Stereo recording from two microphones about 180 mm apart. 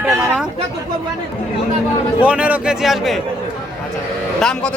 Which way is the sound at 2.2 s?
5° right (ahead or behind).